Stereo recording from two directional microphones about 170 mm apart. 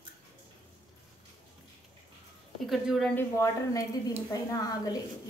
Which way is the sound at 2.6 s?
Centre (ahead or behind).